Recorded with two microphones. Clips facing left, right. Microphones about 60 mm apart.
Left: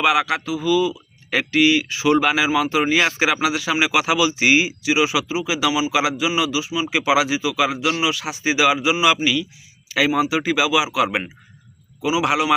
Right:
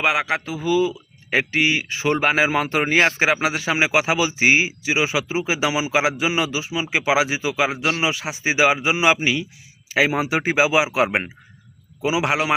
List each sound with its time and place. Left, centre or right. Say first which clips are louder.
0.0 s speech: left 2 dB; right